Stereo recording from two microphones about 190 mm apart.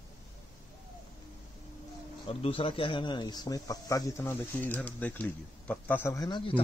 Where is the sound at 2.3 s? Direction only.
30° left (ahead or behind).